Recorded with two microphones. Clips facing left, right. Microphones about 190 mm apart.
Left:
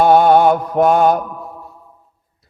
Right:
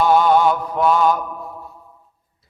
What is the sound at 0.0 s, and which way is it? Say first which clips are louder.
Mantra: left 4 dB; 55° left (ahead or behind).